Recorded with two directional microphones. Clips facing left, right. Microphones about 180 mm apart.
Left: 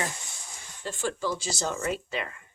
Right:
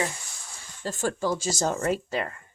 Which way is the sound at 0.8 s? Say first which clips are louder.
Right 3 dB; 45° right (ahead or behind).